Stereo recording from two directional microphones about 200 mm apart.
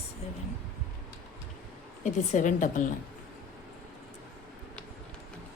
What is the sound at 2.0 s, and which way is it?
Speech, 40° left (ahead or behind).